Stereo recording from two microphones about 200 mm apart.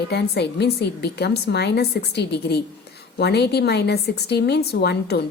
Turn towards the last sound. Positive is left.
turn(degrees=55)  # may be behind; listen again after turning